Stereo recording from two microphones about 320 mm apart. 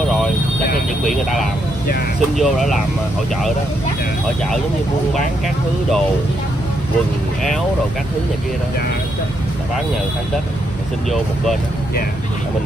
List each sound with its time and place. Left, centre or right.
2.3 s speech: centre